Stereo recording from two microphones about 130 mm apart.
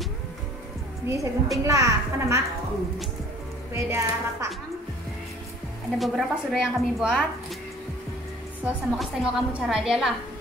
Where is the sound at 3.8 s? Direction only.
20° right (ahead or behind).